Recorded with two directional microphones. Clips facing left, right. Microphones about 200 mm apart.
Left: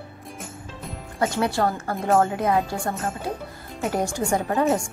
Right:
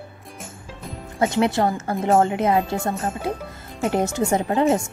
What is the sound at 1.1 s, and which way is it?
Speech, 20° right (ahead or behind).